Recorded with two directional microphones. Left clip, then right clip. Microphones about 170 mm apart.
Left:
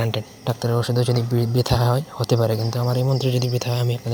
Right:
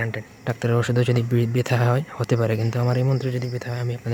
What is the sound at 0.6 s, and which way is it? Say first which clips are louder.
Speech: right 1 dB; 15° right (ahead or behind).